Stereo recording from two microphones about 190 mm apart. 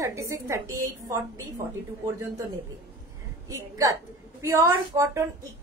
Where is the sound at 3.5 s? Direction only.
15° right (ahead or behind).